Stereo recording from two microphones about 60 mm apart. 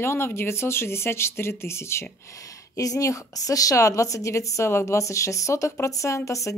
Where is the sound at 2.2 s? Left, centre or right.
Left.